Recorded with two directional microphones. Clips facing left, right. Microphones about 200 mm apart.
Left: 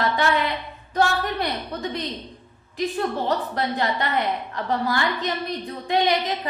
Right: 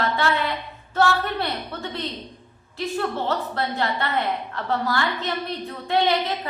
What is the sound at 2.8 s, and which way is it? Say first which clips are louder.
A woman's voice: left 1 dB; 15° left (ahead or behind).